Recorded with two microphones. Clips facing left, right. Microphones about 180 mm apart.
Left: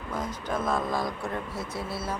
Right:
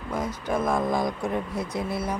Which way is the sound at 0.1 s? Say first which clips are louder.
Right 4 dB; 10° right (ahead or behind).